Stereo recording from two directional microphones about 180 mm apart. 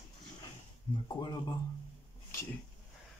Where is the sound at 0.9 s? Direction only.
25° left (ahead or behind).